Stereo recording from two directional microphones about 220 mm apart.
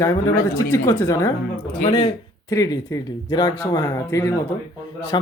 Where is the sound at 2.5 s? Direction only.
15° left (ahead or behind).